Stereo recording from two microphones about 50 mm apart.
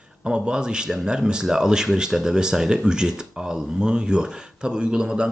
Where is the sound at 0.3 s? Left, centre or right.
Centre.